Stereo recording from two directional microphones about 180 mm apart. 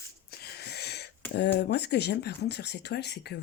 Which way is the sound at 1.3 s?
70° left (ahead or behind).